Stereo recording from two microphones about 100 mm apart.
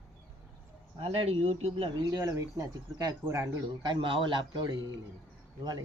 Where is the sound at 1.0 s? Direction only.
80° right.